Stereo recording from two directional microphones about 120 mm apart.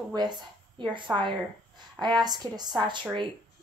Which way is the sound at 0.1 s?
35° right (ahead or behind).